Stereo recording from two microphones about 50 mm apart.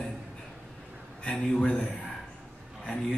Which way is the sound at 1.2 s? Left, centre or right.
Centre.